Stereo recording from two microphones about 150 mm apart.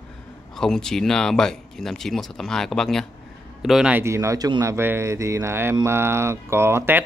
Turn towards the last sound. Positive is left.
turn(degrees=-15)  # may be behind; listen again after turning